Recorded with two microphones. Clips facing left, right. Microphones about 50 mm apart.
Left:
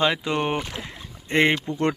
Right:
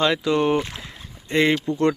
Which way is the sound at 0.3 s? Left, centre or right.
Left.